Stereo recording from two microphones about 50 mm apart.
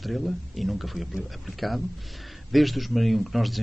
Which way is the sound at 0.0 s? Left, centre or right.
Centre.